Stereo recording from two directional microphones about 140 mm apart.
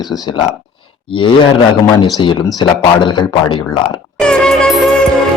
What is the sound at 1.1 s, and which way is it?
Speech, 35° left (ahead or behind).